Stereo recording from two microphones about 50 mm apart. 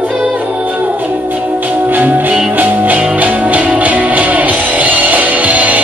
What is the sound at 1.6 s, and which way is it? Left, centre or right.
Music, right.